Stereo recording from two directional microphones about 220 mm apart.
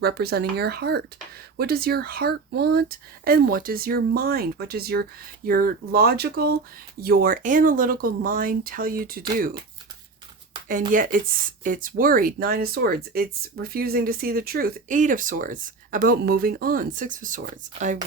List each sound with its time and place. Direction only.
0.0 s speech: 45° right (ahead or behind)
10.9 s speech: 40° right (ahead or behind)